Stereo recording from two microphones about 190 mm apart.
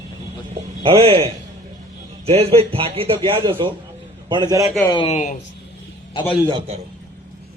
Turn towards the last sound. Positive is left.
turn(degrees=-30)  # may be behind; listen again after turning